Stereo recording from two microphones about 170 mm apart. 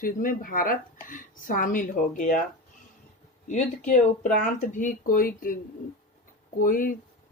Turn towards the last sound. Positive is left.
turn(degrees=50)  # may be behind; listen again after turning